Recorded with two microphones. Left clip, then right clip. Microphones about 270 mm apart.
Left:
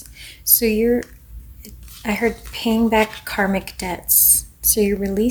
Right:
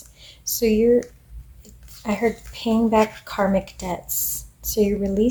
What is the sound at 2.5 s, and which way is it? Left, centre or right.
Speech, left.